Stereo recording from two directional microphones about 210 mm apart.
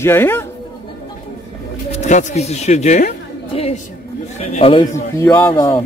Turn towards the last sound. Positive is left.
turn(degrees=15)  # may be behind; listen again after turning